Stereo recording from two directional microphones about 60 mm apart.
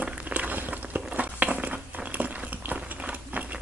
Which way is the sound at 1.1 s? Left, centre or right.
Right.